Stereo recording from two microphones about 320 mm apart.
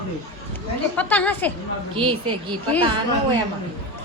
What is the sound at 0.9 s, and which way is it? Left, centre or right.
Speech, centre.